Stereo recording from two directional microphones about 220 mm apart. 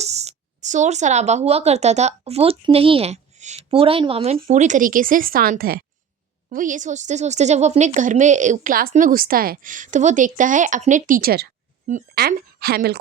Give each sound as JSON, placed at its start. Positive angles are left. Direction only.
{"t": 0.0, "sound": "a woman's voice", "side_deg": -30}